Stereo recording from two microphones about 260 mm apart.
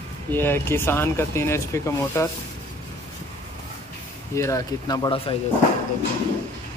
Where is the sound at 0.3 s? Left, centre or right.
Centre.